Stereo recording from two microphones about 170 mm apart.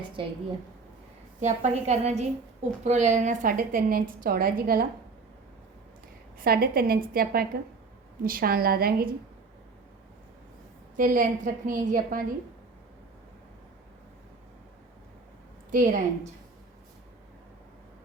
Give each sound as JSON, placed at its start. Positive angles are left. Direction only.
{"t": 0.2, "sound": "a woman's voice", "side_deg": -30}
{"t": 1.4, "sound": "a woman's voice", "side_deg": -45}
{"t": 6.4, "sound": "a woman's voice", "side_deg": -60}
{"t": 10.9, "sound": "a woman's voice", "side_deg": -55}
{"t": 15.7, "sound": "a woman's voice", "side_deg": -50}